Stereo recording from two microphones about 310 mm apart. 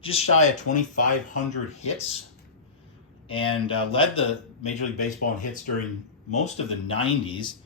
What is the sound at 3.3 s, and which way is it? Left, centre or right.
Speech, centre.